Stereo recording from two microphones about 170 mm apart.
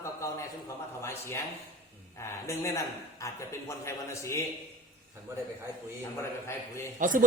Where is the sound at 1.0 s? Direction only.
15° left (ahead or behind).